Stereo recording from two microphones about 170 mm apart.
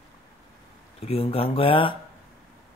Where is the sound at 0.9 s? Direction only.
35° left (ahead or behind).